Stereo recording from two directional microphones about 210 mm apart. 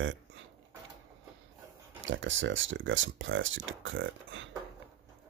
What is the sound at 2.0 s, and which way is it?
Speech, 65° right (ahead or behind).